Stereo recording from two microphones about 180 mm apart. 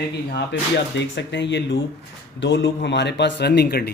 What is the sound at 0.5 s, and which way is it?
Speech, 90° left.